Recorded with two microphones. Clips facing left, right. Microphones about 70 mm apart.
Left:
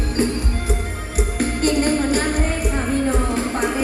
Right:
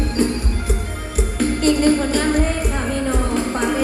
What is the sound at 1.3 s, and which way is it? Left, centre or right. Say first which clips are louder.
Music: right 2 dB; left.